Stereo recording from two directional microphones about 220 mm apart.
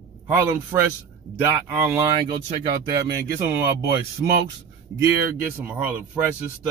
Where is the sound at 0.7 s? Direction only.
15° right (ahead or behind).